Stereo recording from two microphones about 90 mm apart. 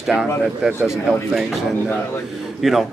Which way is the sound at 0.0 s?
5° right (ahead or behind).